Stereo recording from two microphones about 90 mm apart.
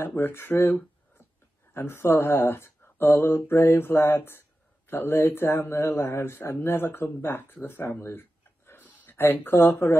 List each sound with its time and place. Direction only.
0.0 s speech: 25° left (ahead or behind)